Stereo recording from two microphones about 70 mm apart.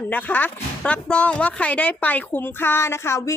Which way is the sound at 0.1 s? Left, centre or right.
Left.